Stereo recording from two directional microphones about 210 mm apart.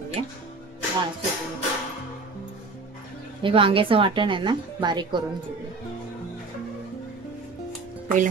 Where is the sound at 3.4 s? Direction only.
25° right (ahead or behind).